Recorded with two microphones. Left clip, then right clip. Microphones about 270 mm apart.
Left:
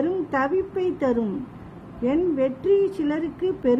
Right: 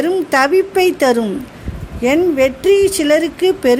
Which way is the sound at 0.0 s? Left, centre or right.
Centre.